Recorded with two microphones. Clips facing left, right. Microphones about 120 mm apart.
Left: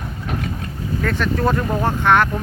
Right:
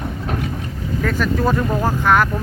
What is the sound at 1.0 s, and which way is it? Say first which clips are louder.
Speech: right 1 dB; 5° right (ahead or behind).